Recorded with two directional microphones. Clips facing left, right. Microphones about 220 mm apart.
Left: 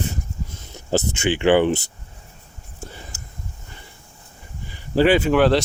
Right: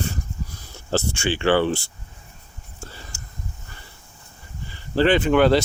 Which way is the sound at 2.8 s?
20° left (ahead or behind).